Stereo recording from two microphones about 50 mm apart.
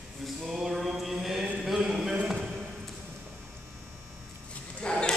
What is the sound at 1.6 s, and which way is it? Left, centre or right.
Speech, centre.